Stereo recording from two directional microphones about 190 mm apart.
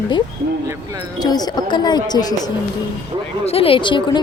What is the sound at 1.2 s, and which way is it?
Speech, 20° left (ahead or behind).